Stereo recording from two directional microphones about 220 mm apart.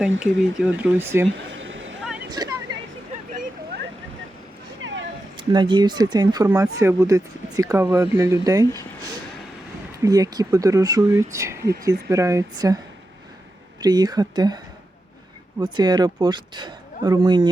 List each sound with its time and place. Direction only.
0.2 s speech: 5° right (ahead or behind)
1.5 s a sound: 60° right (ahead or behind)
2.4 s vehicle: 15° right (ahead or behind)
5.5 s speech: 20° right (ahead or behind)
10.0 s speech: 15° right (ahead or behind)
13.8 s speech: 20° right (ahead or behind)